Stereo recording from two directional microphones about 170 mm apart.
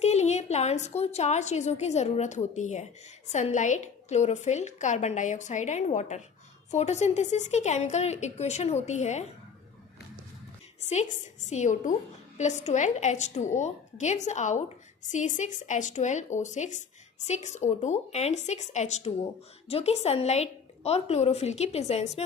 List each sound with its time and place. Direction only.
0.0 s a woman's voice: 40° left (ahead or behind)
10.8 s a sound: 40° left (ahead or behind)
11.4 s a woman's voice: 45° left (ahead or behind)